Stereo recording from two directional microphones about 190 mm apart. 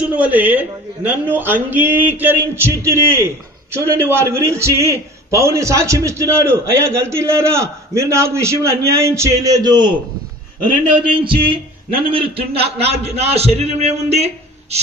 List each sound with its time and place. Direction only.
0.0 s a man's voice: 5° right (ahead or behind); by 14.8 s 35° right (ahead or behind)